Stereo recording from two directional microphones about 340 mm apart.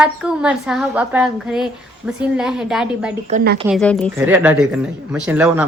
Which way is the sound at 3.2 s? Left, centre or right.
Right.